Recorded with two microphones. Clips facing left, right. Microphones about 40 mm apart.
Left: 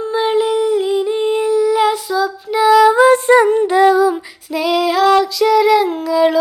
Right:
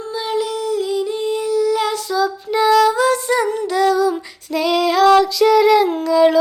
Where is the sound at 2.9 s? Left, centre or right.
Left.